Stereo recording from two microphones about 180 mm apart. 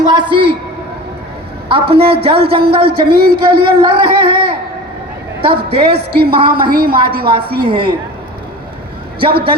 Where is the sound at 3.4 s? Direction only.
25° right (ahead or behind).